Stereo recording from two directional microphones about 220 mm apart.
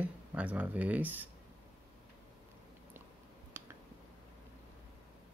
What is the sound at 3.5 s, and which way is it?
Finger snapping, 10° right (ahead or behind).